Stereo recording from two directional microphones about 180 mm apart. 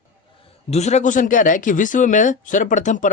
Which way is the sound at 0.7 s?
40° left (ahead or behind).